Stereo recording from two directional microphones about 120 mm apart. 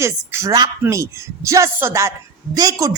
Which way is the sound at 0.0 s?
20° right (ahead or behind).